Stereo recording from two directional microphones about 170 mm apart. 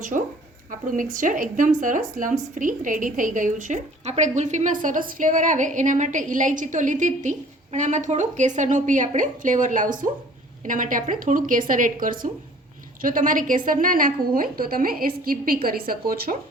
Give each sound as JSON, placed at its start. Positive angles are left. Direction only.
{"t": 0.7, "sound": "a woman's voice", "side_deg": -50}